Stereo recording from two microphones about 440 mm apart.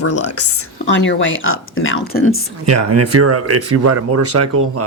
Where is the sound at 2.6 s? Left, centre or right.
Right.